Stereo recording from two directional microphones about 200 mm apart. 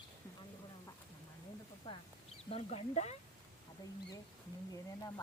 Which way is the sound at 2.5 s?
30° left (ahead or behind).